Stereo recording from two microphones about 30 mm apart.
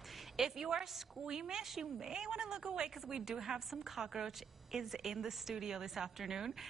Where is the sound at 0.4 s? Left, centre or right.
Centre.